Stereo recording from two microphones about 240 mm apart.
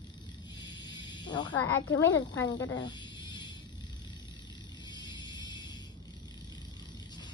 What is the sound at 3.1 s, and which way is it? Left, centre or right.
Music, centre.